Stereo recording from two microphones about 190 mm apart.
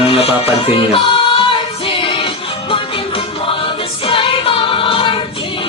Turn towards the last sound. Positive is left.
turn(degrees=30)  # may be behind; listen again after turning